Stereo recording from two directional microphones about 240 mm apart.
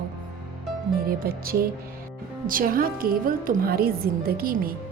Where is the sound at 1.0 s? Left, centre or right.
Right.